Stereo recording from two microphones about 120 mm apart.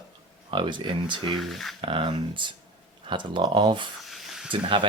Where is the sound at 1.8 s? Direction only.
45° right (ahead or behind).